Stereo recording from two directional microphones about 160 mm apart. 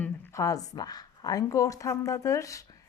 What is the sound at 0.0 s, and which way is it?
A woman's voice, 20° left (ahead or behind).